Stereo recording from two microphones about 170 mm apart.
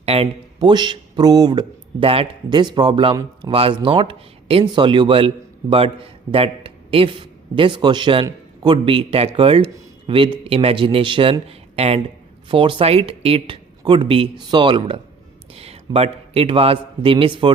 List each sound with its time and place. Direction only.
0.0 s a man's voice: 35° right (ahead or behind)